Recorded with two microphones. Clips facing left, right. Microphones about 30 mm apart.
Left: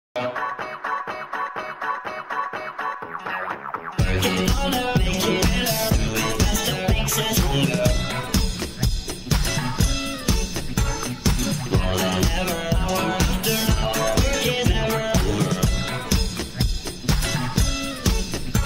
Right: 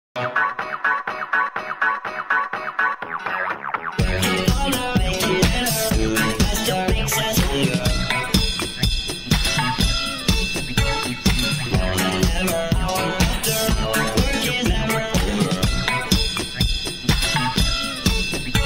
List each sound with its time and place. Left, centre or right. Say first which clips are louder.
0.4 s music: right 6 dB; right
3.9 s music: even; right
4.9 s music: right 2 dB; right
7.0 s music: right 2 dB; centre
7.6 s music: even; right
12.5 s music: right 3 dB; right
13.2 s music: right 1 dB; right
15.1 s music: right 1 dB; right